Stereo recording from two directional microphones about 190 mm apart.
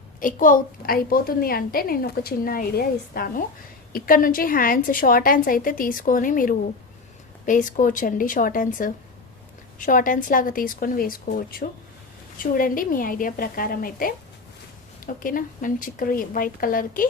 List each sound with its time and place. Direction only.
0.2 s a woman's voice: 45° left (ahead or behind)